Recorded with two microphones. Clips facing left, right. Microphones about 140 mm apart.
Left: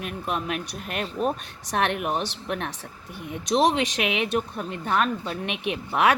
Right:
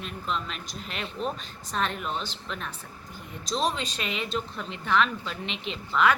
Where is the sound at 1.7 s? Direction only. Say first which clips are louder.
Left 5 dB; 70° left (ahead or behind).